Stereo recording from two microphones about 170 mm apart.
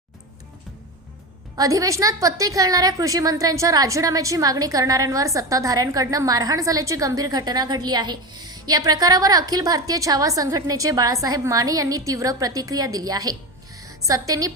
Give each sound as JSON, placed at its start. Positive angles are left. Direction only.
{"t": 1.5, "sound": "a woman's voice", "side_deg": -20}